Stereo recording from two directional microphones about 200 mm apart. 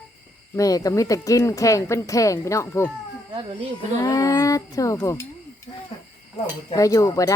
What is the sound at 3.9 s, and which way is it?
Speech, 15° left (ahead or behind).